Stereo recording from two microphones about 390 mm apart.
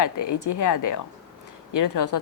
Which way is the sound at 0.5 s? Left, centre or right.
Left.